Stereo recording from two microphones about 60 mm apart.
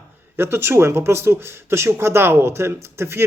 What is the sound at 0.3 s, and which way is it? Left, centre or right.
A man's voice, right.